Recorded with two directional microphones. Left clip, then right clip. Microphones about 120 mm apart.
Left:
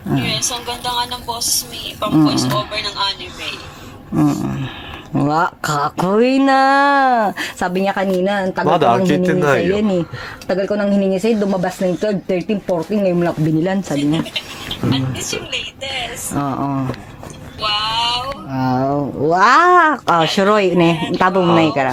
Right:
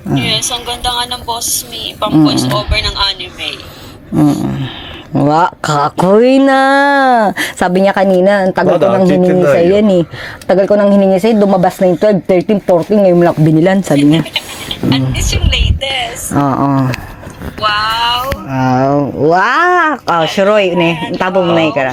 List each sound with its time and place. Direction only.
0.1 s speech: 5° right (ahead or behind); by 8.6 s 50° right (ahead or behind)
8.7 s a man's voice: 20° left (ahead or behind)
9.7 s speech: 40° right (ahead or behind)
14.8 s speech: 20° right (ahead or behind)
15.4 s speech: 30° right (ahead or behind)
16.3 s speech: 45° right (ahead or behind)
18.5 s speech: 30° right (ahead or behind); by 19.7 s 10° right (ahead or behind)
19.7 s speech: centre (ahead or behind)
20.3 s speech: 15° left (ahead or behind)